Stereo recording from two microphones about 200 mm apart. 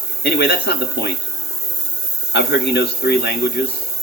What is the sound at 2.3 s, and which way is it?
Speech, 55° left (ahead or behind).